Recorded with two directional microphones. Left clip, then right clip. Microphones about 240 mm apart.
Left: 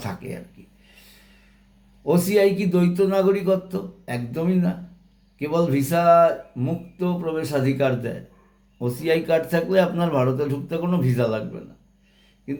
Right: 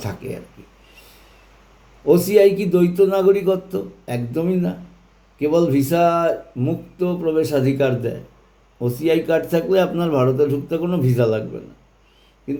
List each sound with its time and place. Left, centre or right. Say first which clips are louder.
0.0 s speech: right 3 dB; centre
2.0 s speech: right 5 dB; centre